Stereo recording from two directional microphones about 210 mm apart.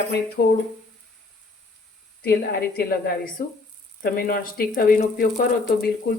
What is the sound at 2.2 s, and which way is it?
Speech, 50° left (ahead or behind).